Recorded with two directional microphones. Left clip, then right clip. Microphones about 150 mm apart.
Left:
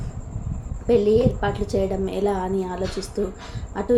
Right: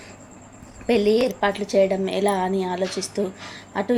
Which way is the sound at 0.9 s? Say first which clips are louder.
Left 1 dB; 15° right (ahead or behind).